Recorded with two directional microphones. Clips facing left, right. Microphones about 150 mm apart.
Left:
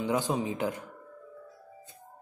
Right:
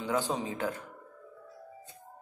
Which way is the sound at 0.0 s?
15° left (ahead or behind).